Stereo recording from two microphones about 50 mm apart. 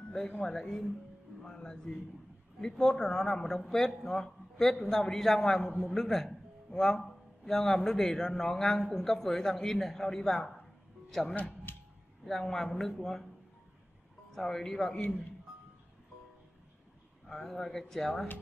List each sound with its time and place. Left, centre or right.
0.4 s a man's voice: centre
11.3 s speech: left
12.3 s a man's voice: centre
14.3 s a man's voice: centre
17.3 s speech: centre